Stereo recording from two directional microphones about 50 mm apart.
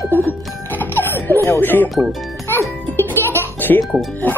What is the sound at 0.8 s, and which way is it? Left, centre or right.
Laughter, left.